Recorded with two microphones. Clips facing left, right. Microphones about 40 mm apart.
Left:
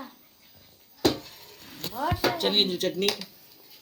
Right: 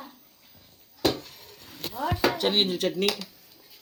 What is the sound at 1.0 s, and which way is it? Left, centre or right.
Dishes, centre.